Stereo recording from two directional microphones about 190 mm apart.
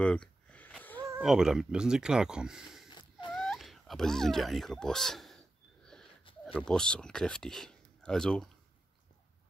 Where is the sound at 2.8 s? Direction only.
25° left (ahead or behind).